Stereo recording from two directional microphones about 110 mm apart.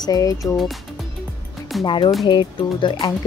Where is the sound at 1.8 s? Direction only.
45° left (ahead or behind).